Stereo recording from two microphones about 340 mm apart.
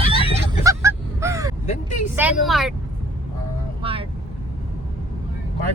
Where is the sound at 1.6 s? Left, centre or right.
Centre.